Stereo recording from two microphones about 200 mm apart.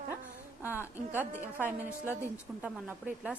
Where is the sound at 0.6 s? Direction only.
10° right (ahead or behind).